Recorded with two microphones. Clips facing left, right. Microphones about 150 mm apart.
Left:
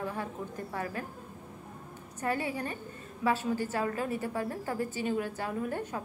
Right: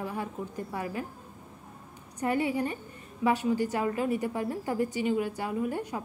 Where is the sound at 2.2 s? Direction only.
15° right (ahead or behind).